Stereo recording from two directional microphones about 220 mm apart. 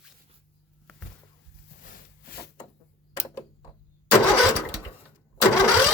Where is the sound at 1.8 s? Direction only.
40° left (ahead or behind).